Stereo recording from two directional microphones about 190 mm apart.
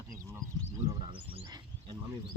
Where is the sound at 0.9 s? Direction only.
25° right (ahead or behind).